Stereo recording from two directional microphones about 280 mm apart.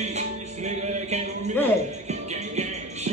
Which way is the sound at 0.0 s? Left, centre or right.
Right.